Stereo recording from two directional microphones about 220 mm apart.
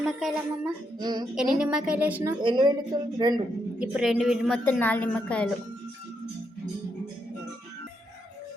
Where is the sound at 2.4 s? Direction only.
20° right (ahead or behind).